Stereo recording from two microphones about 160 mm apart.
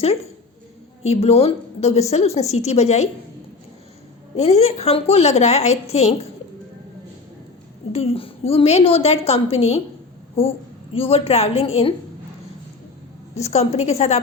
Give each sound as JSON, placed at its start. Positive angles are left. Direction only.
{"t": 1.0, "sound": "a woman's voice", "side_deg": 40}
{"t": 4.4, "sound": "a woman's voice", "side_deg": 40}
{"t": 7.9, "sound": "a woman's voice", "side_deg": 35}
{"t": 10.9, "sound": "a woman's voice", "side_deg": 40}
{"t": 13.3, "sound": "a woman's voice", "side_deg": 40}